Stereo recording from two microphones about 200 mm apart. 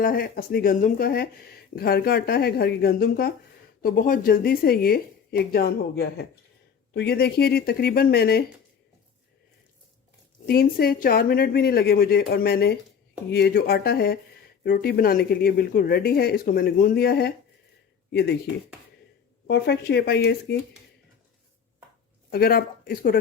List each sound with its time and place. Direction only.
0.0 s speech: 45° left (ahead or behind)
10.4 s speech: 50° left (ahead or behind)
19.5 s speech: 55° left (ahead or behind)
22.3 s speech: 50° left (ahead or behind)